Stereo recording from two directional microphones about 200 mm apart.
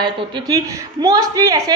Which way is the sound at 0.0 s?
20° right (ahead or behind).